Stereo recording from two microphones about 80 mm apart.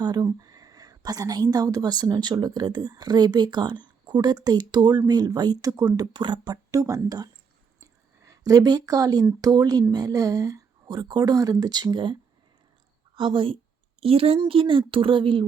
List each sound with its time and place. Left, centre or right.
0.0 s a woman's voice: right
6.1 s speech: right
6.5 s speech: right
7.8 s a sound: right
9.4 s speech: right
13.1 s speech: right